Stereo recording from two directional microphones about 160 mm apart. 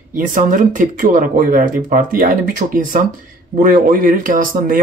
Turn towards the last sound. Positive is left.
turn(degrees=-55)  # may be behind; listen again after turning